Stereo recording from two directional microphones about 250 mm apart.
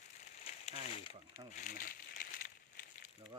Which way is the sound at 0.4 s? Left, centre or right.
Left.